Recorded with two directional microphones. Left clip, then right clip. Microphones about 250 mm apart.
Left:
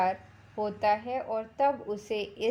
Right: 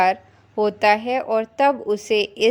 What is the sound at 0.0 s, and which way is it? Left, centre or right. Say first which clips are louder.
A woman's voice: right 10 dB; right.